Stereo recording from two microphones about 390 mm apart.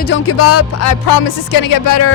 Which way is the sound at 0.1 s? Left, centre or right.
Left.